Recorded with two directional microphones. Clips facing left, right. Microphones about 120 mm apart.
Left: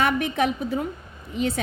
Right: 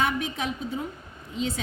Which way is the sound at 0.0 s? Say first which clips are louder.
Left 5 dB; 60° left (ahead or behind).